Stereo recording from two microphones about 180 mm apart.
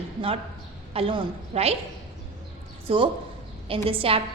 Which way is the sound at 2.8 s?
30° right (ahead or behind).